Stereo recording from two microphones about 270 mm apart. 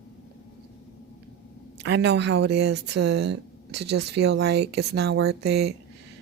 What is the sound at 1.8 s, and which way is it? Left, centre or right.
Speech, right.